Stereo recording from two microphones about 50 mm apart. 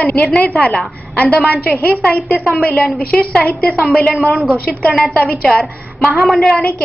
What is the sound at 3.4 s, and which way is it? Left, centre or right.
Speech, left.